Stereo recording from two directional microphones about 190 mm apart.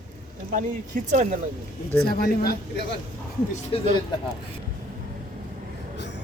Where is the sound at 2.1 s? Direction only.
55° left (ahead or behind).